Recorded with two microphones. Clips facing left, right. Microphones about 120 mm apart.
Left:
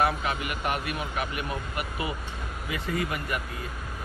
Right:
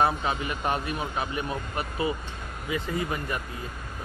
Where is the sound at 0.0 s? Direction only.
30° right (ahead or behind).